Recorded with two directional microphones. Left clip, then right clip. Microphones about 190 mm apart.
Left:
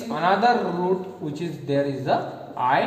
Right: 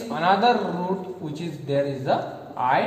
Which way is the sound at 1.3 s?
20° right (ahead or behind).